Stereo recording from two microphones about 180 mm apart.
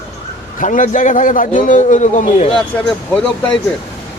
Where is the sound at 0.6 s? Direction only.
45° left (ahead or behind).